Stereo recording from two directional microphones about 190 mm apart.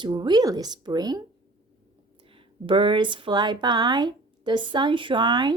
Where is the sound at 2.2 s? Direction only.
30° right (ahead or behind).